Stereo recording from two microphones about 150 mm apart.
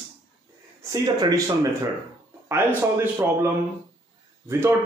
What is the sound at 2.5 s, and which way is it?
Speech, 15° right (ahead or behind).